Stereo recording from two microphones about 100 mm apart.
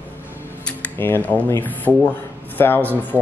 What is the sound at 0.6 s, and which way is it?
Speech, 20° left (ahead or behind).